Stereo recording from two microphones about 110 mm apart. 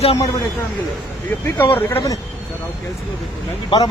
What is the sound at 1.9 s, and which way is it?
Speech, 30° left (ahead or behind).